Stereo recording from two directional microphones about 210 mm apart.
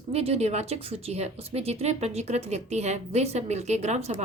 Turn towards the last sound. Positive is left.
turn(degrees=-30)  # may be behind; listen again after turning